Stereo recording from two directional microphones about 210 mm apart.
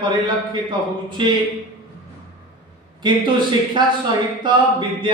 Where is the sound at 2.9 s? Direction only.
20° right (ahead or behind).